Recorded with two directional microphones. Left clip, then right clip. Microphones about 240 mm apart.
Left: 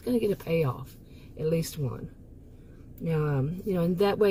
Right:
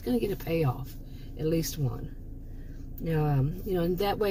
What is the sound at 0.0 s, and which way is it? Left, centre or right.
Speech, left.